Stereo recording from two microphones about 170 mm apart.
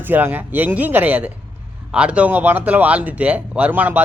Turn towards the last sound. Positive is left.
turn(degrees=-10)  # may be behind; listen again after turning